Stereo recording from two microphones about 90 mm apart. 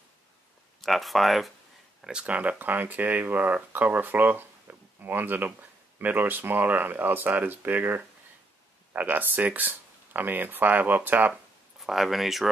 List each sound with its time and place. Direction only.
0.7 s speech: centre (ahead or behind); by 11.3 s 20° right (ahead or behind)
11.8 s speech: centre (ahead or behind)